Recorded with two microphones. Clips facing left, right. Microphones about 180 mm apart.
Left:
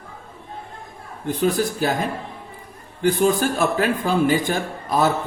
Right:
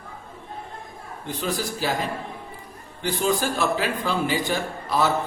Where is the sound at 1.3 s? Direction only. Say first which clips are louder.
Left 7 dB; 50° left (ahead or behind).